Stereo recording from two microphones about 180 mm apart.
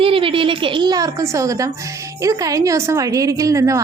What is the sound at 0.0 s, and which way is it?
A woman's voice, 30° right (ahead or behind).